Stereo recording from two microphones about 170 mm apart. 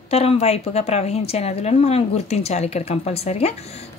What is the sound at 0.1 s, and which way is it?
Speech, 35° left (ahead or behind).